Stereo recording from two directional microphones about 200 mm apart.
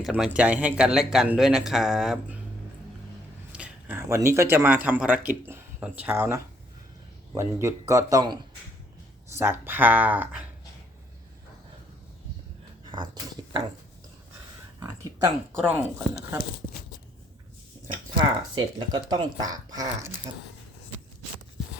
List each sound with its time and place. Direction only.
0.0 s speech: centre (ahead or behind)
3.5 s speech: 10° right (ahead or behind)
12.8 s speech: 25° right (ahead or behind)
14.8 s speech: 15° right (ahead or behind)
17.7 s a sound: 35° right (ahead or behind)
18.5 s speech: 25° right (ahead or behind)